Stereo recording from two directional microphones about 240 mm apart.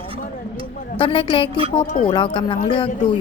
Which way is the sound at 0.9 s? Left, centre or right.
Left.